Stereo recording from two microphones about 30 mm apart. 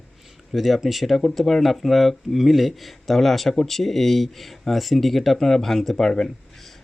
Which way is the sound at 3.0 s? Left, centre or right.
Centre.